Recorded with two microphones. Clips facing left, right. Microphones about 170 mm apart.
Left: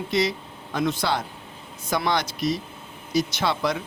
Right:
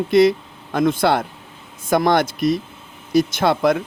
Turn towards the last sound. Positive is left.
turn(degrees=-50)  # may be behind; listen again after turning